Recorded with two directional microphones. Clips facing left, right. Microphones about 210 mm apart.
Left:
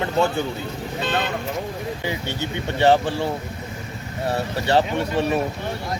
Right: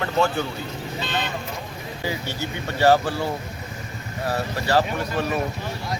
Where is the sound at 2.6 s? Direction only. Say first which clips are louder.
Left 1 dB; 20° left (ahead or behind).